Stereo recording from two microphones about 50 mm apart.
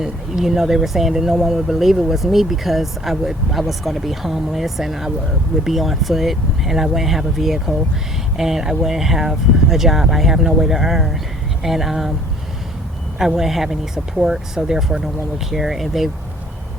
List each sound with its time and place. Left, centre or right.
0.0 s speech: centre
13.1 s speech: centre